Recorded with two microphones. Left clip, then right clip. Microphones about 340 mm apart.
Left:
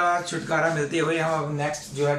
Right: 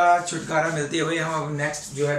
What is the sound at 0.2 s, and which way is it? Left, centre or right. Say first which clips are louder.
Speech: even; centre.